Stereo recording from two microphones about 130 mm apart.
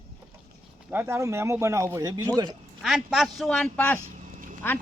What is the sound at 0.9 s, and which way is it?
Speech, 20° right (ahead or behind).